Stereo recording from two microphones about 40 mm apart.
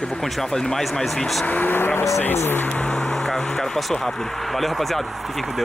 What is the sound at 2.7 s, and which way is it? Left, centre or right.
Speech, left.